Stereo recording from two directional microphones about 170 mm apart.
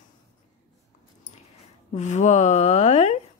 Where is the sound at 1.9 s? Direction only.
45° left (ahead or behind).